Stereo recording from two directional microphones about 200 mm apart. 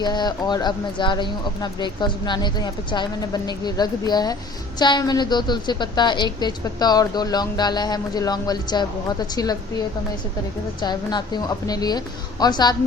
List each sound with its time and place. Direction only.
0.0 s a woman's voice: 20° left (ahead or behind)
10.8 s a woman's voice: 20° left (ahead or behind)